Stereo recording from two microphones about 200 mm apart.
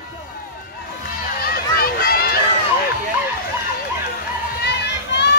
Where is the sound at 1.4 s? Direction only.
50° left (ahead or behind).